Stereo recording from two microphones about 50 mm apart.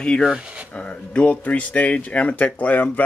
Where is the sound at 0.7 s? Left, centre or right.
Left.